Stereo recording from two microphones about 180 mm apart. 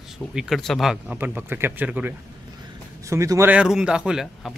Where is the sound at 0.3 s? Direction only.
Centre (ahead or behind).